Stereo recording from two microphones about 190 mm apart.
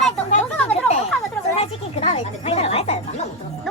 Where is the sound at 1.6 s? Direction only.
35° left (ahead or behind).